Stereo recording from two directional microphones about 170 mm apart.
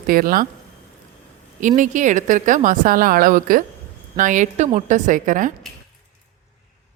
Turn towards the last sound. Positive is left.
turn(degrees=-50)  # may be behind; listen again after turning